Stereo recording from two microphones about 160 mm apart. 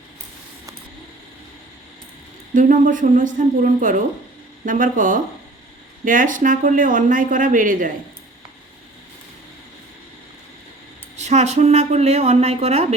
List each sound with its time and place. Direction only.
2.6 s speech: 55° right (ahead or behind)
11.2 s speech: 45° right (ahead or behind)